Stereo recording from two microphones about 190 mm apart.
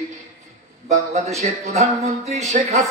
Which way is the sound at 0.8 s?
35° right (ahead or behind).